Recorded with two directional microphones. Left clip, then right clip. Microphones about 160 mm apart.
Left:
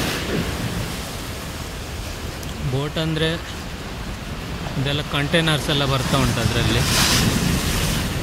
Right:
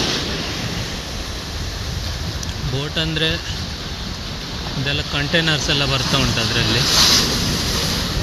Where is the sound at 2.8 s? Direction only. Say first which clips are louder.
Right 3 dB; 20° left (ahead or behind).